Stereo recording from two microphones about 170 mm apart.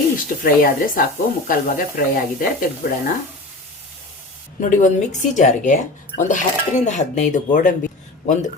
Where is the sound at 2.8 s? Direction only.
55° left (ahead or behind).